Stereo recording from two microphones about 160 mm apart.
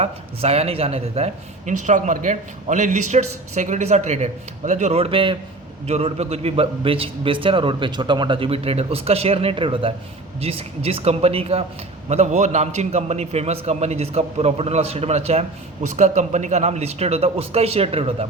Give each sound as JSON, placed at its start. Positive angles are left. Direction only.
{"t": 0.0, "sound": "a man's voice", "side_deg": -40}